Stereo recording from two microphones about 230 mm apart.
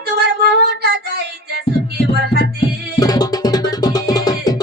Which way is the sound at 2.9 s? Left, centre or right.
Centre.